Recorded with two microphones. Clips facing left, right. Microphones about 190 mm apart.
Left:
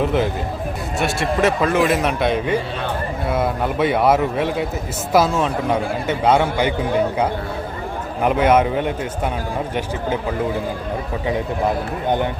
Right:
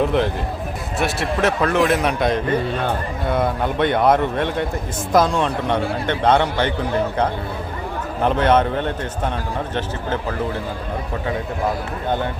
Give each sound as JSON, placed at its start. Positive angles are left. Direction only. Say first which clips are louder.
{"t": 0.0, "sound": "a man's voice", "louder": "even", "side_deg": 0}
{"t": 8.2, "sound": "a man's voice", "louder": "left 1 dB", "side_deg": 10}
{"t": 12.0, "sound": "a man's voice", "louder": "left 2 dB", "side_deg": 15}